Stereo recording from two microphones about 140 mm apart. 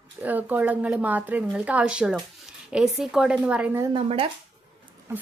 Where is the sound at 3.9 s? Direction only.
40° right (ahead or behind).